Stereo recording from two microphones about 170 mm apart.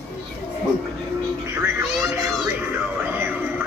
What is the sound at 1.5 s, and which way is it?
Music, 15° right (ahead or behind).